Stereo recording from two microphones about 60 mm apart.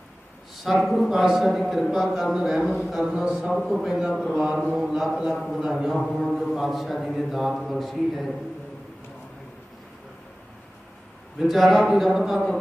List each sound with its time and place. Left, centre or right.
0.5 s speech: centre
4.4 s mantra: centre
6.0 s speech: centre
11.3 s speech: centre